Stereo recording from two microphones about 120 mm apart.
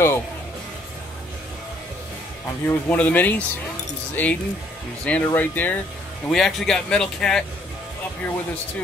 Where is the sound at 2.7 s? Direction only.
15° left (ahead or behind).